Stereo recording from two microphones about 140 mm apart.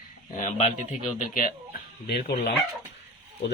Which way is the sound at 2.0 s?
90° left.